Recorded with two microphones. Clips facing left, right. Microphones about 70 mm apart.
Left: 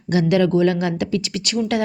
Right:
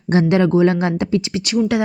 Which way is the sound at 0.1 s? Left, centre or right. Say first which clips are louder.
Right 2 dB; right.